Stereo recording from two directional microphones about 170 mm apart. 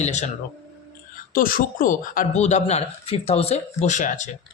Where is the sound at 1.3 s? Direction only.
55° left (ahead or behind).